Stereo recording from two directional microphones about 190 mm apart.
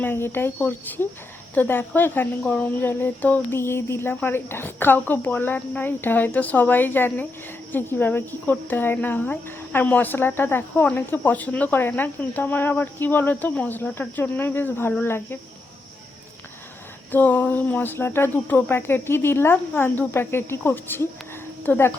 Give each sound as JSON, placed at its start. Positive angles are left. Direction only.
{"t": 0.0, "sound": "speech", "side_deg": 10}
{"t": 17.1, "sound": "speech", "side_deg": 10}